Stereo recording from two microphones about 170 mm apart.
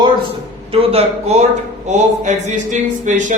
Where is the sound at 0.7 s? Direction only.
35° right (ahead or behind).